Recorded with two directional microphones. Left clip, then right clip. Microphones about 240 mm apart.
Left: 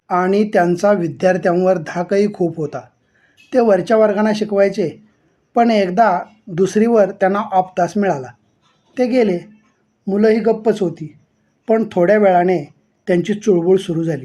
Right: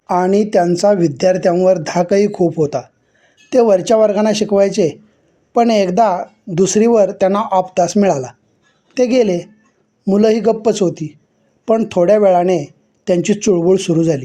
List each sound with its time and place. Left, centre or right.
0.1 s speech: right